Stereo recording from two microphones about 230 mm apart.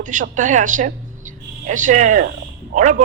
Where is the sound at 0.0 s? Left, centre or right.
Right.